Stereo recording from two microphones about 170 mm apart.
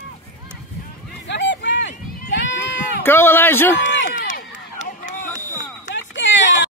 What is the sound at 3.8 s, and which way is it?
Run, 90° left.